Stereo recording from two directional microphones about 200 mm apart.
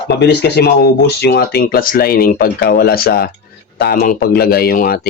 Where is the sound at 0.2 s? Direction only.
55° left (ahead or behind).